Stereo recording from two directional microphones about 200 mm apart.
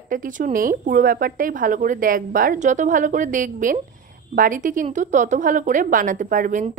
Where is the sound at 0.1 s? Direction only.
40° right (ahead or behind).